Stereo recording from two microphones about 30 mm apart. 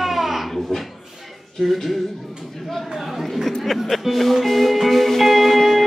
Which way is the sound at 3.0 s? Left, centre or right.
Centre.